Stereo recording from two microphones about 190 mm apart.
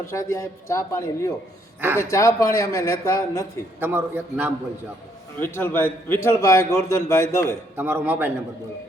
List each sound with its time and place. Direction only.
0.0 s a man's voice: 15° left (ahead or behind)
3.8 s a man's voice: 10° right (ahead or behind)
5.4 s a man's voice: 10° left (ahead or behind)
7.8 s a man's voice: 10° right (ahead or behind)